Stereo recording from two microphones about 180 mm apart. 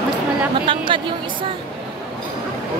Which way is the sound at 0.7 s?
30° right (ahead or behind).